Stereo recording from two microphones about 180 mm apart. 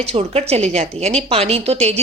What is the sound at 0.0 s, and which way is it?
A woman's voice, 35° right (ahead or behind).